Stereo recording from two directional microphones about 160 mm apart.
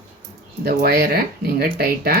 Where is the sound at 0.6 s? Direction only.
75° right (ahead or behind).